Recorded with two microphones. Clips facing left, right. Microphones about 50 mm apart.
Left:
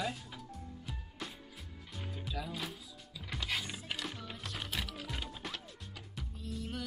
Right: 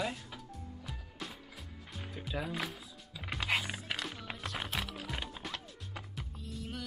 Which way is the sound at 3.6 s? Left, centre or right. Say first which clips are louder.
Right 3 dB; right.